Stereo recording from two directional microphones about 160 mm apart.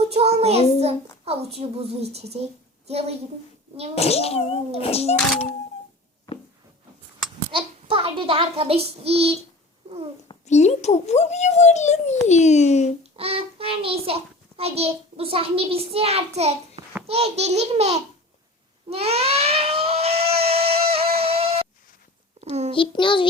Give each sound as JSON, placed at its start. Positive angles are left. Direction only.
{"t": 0.1, "sound": "child singing", "side_deg": -40}
{"t": 1.2, "sound": "a child's voice", "side_deg": -40}
{"t": 3.9, "sound": "a child's voice", "side_deg": 40}
{"t": 7.5, "sound": "a child's voice", "side_deg": -35}
{"t": 10.4, "sound": "a child's voice", "side_deg": 45}
{"t": 13.0, "sound": "a child's voice", "side_deg": -35}
{"t": 18.9, "sound": "a sound", "side_deg": -40}
{"t": 22.7, "sound": "a child's voice", "side_deg": 30}